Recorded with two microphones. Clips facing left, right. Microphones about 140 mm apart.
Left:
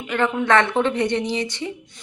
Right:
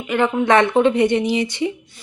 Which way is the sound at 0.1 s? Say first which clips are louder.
Right 3 dB; 10° right (ahead or behind).